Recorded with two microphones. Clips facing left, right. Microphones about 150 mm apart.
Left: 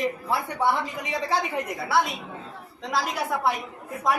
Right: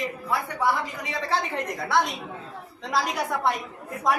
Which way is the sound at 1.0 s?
15° left (ahead or behind).